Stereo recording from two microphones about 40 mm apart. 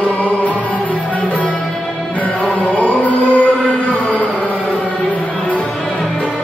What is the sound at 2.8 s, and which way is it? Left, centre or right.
Chant, left.